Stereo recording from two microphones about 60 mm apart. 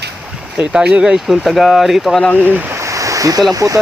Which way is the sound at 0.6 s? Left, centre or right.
Centre.